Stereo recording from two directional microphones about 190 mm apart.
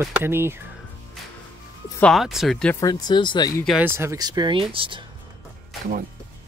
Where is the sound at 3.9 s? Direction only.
15° right (ahead or behind).